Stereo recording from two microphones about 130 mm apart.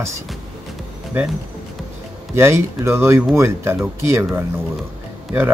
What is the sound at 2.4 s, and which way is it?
Speech, 20° right (ahead or behind).